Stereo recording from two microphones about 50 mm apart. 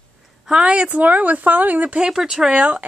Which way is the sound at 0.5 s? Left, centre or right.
Centre.